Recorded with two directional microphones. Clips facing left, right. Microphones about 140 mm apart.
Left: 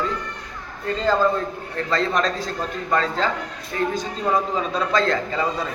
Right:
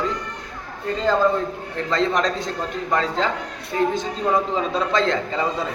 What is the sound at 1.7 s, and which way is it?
A man's voice, 20° right (ahead or behind).